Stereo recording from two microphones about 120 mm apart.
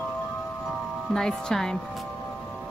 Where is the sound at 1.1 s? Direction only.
5° left (ahead or behind).